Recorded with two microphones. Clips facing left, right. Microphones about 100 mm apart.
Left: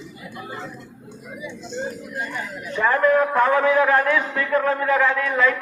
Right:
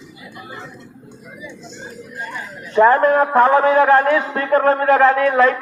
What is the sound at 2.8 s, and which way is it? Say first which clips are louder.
A man's voice: right 6 dB; 40° right (ahead or behind).